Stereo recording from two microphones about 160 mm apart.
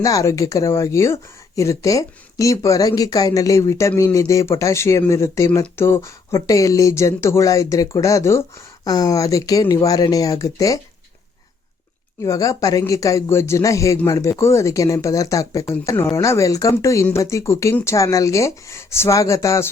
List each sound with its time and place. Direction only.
0.0 s speech: 20° left (ahead or behind)
12.2 s speech: 20° left (ahead or behind)